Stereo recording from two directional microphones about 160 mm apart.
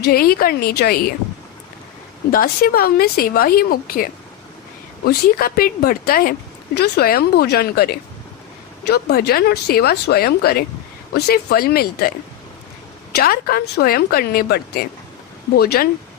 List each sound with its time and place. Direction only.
0.0 s a woman's voice: 70° left (ahead or behind)
2.3 s a woman's voice: 65° left (ahead or behind)
6.7 s a woman's voice: 80° left
8.8 s a woman's voice: 85° left
13.1 s a woman's voice: 70° left (ahead or behind)